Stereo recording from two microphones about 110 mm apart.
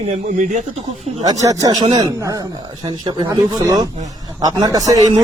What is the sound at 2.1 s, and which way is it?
Speech, 30° right (ahead or behind).